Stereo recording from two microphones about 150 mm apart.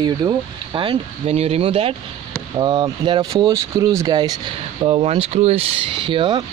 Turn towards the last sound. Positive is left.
turn(degrees=-35)  # may be behind; listen again after turning